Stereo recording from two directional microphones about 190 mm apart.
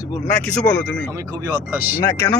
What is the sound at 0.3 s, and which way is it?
Speech, 5° left (ahead or behind).